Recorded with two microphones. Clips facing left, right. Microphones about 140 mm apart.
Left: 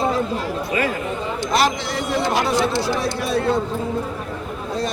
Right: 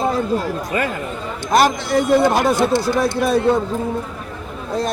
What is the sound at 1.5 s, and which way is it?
Speech, 50° right (ahead or behind).